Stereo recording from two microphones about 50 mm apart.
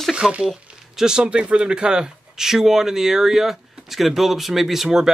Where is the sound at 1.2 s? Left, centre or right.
Centre.